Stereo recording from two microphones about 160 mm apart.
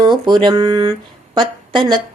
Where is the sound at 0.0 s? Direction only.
30° right (ahead or behind).